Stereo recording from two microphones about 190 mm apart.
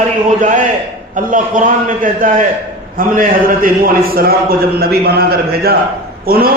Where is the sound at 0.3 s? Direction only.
40° right (ahead or behind).